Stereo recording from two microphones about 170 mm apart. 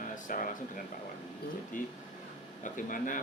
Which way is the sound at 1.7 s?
50° left (ahead or behind).